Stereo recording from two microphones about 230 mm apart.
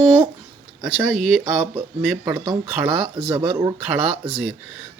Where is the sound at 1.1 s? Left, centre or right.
Centre.